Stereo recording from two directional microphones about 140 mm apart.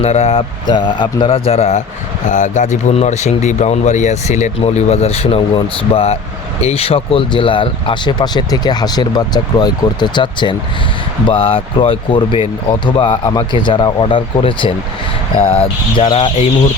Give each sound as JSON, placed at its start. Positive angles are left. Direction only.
{"t": 0.0, "sound": "speech", "side_deg": 45}
{"t": 0.7, "sound": "speech", "side_deg": 35}
{"t": 2.2, "sound": "speech", "side_deg": 60}